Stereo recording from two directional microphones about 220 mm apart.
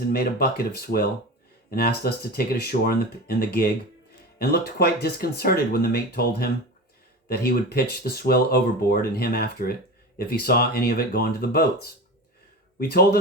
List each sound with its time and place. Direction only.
0.1 s speech: 45° left (ahead or behind)
7.3 s speech: 45° left (ahead or behind)